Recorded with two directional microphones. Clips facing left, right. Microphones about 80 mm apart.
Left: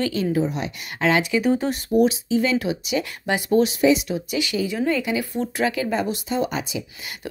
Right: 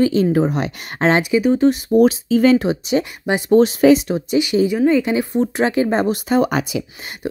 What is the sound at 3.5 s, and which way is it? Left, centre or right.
Speech, right.